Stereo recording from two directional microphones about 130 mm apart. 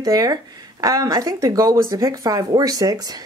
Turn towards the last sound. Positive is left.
turn(degrees=-30)  # may be behind; listen again after turning